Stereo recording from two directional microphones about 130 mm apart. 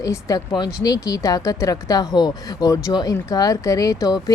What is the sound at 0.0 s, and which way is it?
Speech, 25° left (ahead or behind).